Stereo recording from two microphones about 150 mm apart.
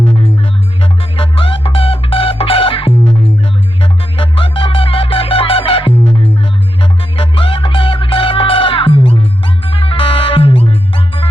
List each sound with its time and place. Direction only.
0.8 s music: 40° left (ahead or behind)